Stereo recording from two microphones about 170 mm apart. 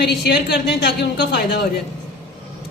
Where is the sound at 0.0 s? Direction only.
75° left (ahead or behind).